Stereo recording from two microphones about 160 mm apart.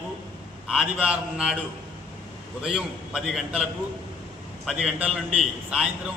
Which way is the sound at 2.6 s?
5° right (ahead or behind).